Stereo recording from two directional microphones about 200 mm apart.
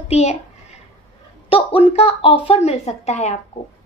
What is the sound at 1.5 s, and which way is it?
A woman's voice, 30° left (ahead or behind).